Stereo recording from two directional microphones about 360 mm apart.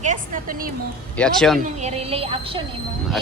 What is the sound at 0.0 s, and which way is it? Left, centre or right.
Speech, right.